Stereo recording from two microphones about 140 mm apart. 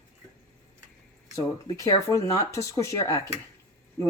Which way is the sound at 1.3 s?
25° left (ahead or behind).